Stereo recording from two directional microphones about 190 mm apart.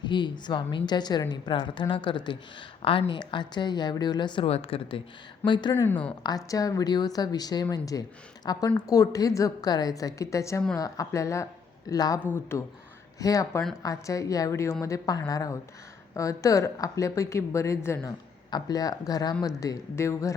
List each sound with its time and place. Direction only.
0.0 s a woman's voice: 25° left (ahead or behind)
5.7 s a woman's voice: 10° left (ahead or behind)
6.2 s a woman's voice: 20° left (ahead or behind)